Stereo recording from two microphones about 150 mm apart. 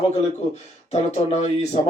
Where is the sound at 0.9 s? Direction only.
50° left (ahead or behind).